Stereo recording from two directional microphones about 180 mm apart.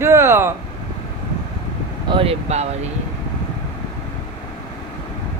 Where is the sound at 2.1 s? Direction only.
30° right (ahead or behind).